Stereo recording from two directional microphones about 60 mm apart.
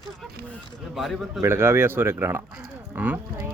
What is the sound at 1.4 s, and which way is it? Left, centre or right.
Speech, right.